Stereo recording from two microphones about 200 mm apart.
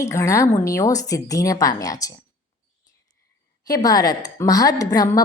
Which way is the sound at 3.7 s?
20° left (ahead or behind).